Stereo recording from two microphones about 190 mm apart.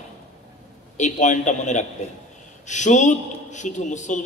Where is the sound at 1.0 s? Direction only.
40° left (ahead or behind).